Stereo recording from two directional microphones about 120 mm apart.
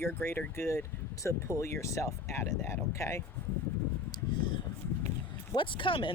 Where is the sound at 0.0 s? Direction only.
20° left (ahead or behind).